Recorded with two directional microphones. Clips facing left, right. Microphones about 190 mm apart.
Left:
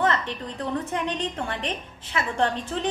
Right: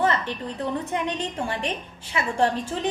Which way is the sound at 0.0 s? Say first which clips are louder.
Right 1 dB; 5° right (ahead or behind).